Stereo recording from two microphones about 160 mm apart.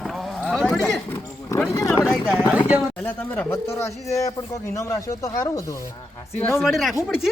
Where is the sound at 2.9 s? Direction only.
10° left (ahead or behind).